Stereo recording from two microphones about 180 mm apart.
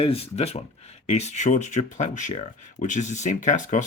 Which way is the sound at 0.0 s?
35° left (ahead or behind).